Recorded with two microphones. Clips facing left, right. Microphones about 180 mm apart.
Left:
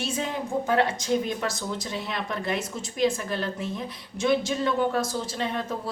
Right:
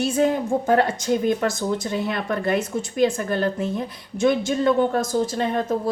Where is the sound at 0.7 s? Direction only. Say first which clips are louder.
Right 4 dB; 50° right (ahead or behind).